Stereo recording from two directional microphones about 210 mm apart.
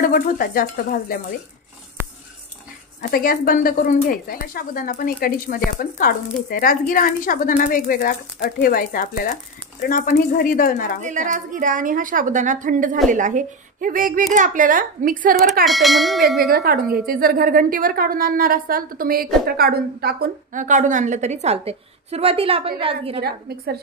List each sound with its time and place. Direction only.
0.0 s speech: 45° left (ahead or behind)
3.0 s speech: 45° left (ahead or behind)
11.0 s a woman's voice: 35° right (ahead or behind)
15.6 s a sound: centre (ahead or behind)
16.4 s a woman's voice: 45° right (ahead or behind); by 23.2 s 25° right (ahead or behind)
23.2 s a woman's voice: 45° right (ahead or behind)